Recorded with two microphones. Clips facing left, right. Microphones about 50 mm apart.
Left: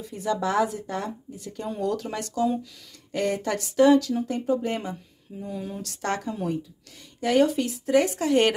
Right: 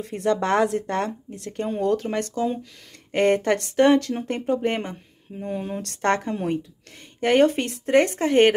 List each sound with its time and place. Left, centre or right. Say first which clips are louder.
0.0 s speech: right 4 dB; right
1.7 s speech: right 4 dB; right
3.1 s speech: right 6 dB; right